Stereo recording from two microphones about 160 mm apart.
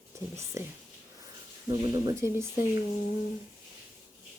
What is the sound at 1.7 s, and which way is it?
Speech, 25° right (ahead or behind).